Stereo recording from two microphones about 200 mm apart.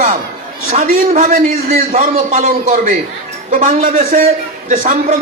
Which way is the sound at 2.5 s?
45° right (ahead or behind).